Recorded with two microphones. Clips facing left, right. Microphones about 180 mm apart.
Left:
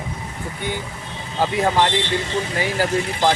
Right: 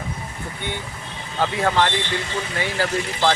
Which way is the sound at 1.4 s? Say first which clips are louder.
Left 2 dB; 15° left (ahead or behind).